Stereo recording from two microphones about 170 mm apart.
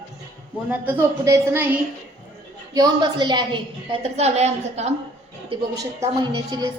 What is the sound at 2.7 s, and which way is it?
A woman's voice, 25° right (ahead or behind).